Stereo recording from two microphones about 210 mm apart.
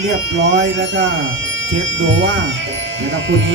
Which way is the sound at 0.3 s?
70° right (ahead or behind).